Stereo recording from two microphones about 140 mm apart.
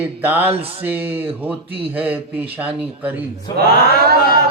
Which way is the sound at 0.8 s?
15° right (ahead or behind).